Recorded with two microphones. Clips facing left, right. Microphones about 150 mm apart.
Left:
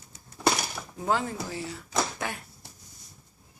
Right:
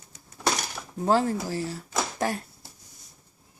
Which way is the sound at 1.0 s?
35° right (ahead or behind).